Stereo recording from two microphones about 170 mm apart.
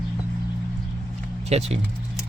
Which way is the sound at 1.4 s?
40° right (ahead or behind).